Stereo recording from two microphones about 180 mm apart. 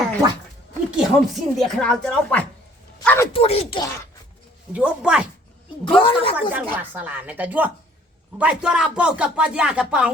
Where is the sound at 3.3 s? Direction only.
35° left (ahead or behind).